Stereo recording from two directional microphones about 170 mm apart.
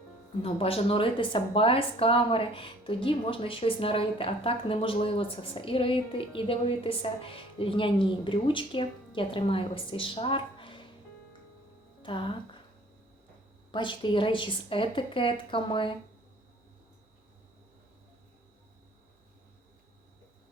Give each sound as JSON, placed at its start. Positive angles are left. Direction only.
{"t": 0.4, "sound": "speech", "side_deg": 35}
{"t": 12.0, "sound": "a woman's voice", "side_deg": 30}
{"t": 13.7, "sound": "a woman's voice", "side_deg": 30}